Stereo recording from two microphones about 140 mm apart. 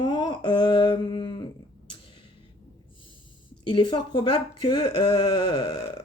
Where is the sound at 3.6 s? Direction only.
35° left (ahead or behind).